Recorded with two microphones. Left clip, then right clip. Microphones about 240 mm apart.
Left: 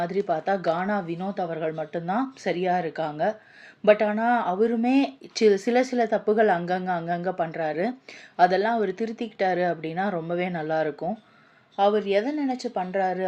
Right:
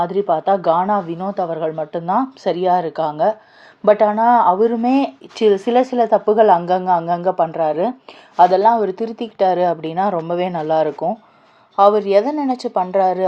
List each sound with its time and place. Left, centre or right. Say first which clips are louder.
0.0 s a woman's voice: right 8 dB; centre